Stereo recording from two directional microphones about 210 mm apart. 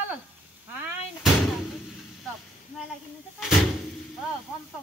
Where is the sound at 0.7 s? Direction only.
10° right (ahead or behind).